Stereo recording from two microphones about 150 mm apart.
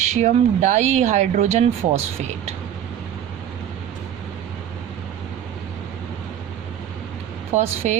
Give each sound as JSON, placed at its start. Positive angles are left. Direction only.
{"t": 0.0, "sound": "speech", "side_deg": -50}
{"t": 7.5, "sound": "speech", "side_deg": -50}